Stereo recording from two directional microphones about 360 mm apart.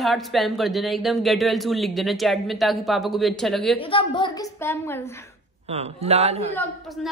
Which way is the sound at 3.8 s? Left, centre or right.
Centre.